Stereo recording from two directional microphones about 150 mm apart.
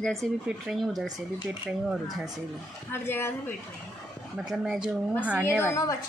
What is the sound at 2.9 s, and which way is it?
Speech, 15° left (ahead or behind).